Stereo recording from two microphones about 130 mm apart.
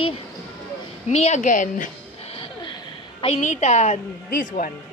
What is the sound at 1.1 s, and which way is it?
Speech, 60° left (ahead or behind).